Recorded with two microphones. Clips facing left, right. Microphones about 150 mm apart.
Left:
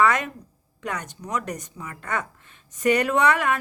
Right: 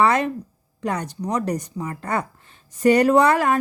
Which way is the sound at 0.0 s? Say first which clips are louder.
Right 3 dB; 30° right (ahead or behind).